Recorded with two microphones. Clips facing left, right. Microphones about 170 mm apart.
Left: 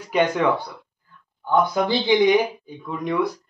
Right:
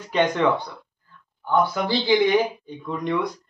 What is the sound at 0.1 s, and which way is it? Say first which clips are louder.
Speech: left 1 dB; 10° left (ahead or behind).